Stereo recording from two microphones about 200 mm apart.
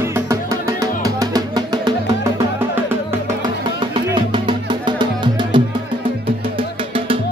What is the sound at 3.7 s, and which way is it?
Music, 25° right (ahead or behind).